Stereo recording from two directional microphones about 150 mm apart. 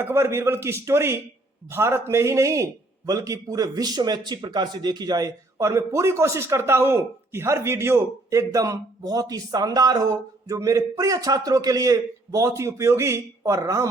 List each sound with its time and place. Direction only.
0.0 s a man's voice: 15° right (ahead or behind)